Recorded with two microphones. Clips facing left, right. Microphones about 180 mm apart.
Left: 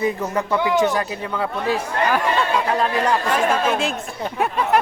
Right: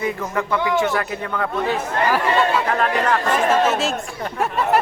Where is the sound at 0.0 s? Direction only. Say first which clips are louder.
Left 2 dB; 20° left (ahead or behind).